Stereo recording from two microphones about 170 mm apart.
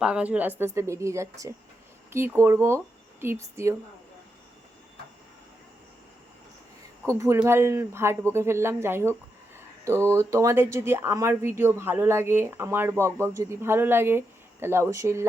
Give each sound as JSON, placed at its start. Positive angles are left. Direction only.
{"t": 0.0, "sound": "speech", "side_deg": -5}
{"t": 7.2, "sound": "speech", "side_deg": -15}